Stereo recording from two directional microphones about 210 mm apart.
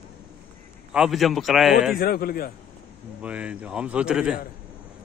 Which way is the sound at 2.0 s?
45° left (ahead or behind).